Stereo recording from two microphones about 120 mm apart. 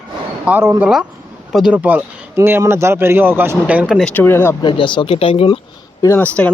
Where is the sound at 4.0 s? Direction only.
15° left (ahead or behind).